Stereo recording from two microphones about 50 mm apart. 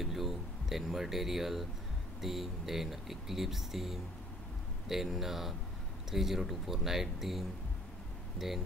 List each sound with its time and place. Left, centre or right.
0.0 s speech: centre